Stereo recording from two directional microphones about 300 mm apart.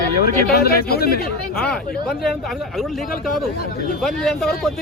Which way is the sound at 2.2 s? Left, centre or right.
Centre.